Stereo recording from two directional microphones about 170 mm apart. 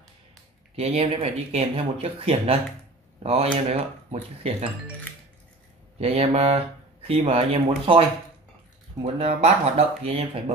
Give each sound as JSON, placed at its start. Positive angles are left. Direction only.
{"t": 0.7, "sound": "speech", "side_deg": -40}
{"t": 5.9, "sound": "speech", "side_deg": -35}
{"t": 9.0, "sound": "speech", "side_deg": -35}